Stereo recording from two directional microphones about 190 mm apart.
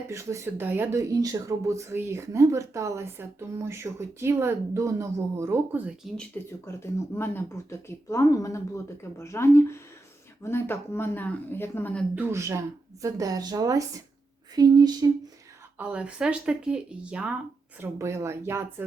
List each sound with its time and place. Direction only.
0.1 s speech: 15° right (ahead or behind)
6.3 s speech: 10° left (ahead or behind)
12.1 s speech: 15° right (ahead or behind)
15.8 s speech: 5° right (ahead or behind)